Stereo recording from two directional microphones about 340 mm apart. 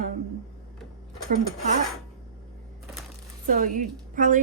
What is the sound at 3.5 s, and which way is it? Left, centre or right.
Speech, right.